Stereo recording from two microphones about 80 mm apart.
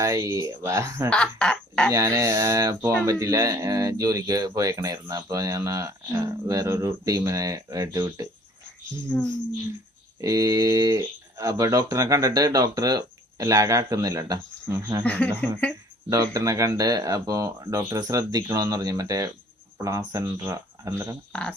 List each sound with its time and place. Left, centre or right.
0.0 s speech: right
1.1 s speech: centre
1.9 s speech: right
9.0 s speech: centre
10.2 s speech: right
15.0 s speech: centre
16.0 s speech: right